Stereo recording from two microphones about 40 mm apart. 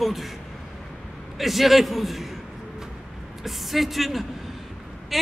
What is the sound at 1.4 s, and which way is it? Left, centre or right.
Speech, centre.